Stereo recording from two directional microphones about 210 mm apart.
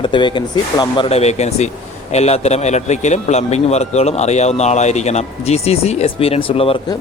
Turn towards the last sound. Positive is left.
turn(degrees=25)  # may be behind; listen again after turning